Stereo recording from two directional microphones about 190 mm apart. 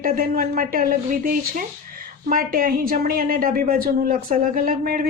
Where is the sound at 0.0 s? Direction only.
50° right (ahead or behind).